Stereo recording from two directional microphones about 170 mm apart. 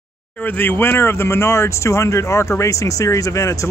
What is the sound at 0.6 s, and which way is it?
Speech, 10° left (ahead or behind).